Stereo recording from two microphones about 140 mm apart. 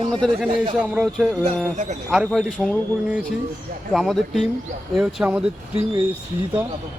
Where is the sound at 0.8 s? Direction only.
5° right (ahead or behind).